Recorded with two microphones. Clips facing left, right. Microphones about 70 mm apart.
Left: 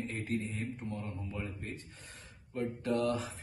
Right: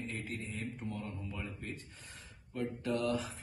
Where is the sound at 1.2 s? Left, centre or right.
Left.